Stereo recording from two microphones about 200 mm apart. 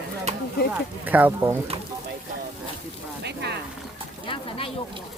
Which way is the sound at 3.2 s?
55° right (ahead or behind).